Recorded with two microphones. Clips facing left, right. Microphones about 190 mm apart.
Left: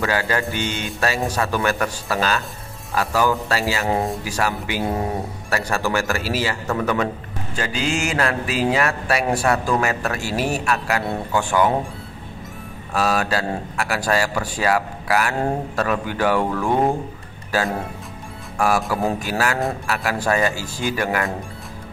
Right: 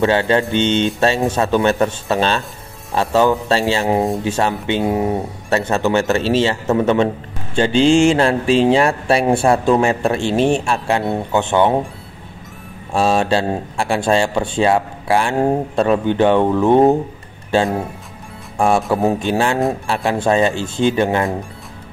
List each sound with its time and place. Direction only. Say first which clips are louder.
0.0 s speech: right 7 dB; 25° right (ahead or behind)
12.9 s speech: right 5 dB; 25° right (ahead or behind)